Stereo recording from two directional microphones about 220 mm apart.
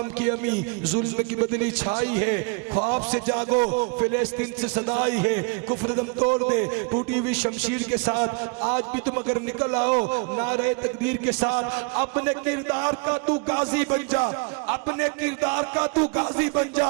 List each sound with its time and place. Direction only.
0.2 s a man's voice: 15° right (ahead or behind)
2.0 s a man's voice: 15° right (ahead or behind)
4.1 s a man's voice: 10° right (ahead or behind)
4.7 s a man's voice: 25° right (ahead or behind)
8.0 s a man's voice: 20° right (ahead or behind)